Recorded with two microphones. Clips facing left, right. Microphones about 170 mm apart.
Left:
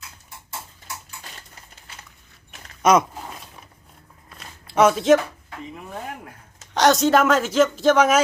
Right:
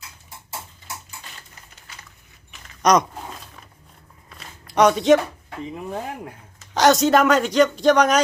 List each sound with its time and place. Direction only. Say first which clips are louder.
2.8 s a sound: even; 5° left (ahead or behind)
4.7 s speech: right 1 dB; 5° left (ahead or behind)
5.7 s speech: right 5 dB; 20° right (ahead or behind)
6.7 s speech: right 1 dB; centre (ahead or behind)